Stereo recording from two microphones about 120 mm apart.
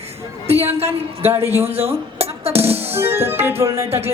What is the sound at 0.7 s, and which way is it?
Speech, 55° right (ahead or behind).